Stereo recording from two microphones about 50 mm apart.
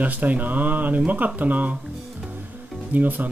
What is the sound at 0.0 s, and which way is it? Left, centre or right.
Speech, right.